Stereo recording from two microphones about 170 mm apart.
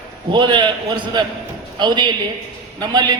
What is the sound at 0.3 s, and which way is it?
Speech, 25° right (ahead or behind).